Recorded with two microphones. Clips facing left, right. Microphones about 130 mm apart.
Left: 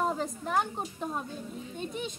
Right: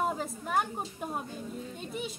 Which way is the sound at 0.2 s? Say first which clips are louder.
Left 1 dB; 5° right (ahead or behind).